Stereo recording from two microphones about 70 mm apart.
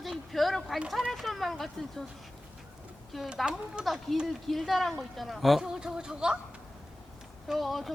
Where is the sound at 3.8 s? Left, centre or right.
Centre.